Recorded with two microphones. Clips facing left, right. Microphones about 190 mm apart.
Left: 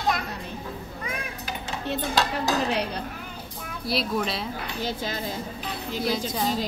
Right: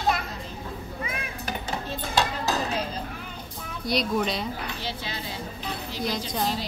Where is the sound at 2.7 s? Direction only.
70° left (ahead or behind).